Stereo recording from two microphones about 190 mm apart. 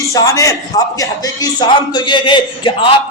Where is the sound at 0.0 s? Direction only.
15° left (ahead or behind).